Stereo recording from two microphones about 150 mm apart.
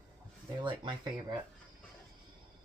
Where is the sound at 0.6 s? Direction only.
30° right (ahead or behind).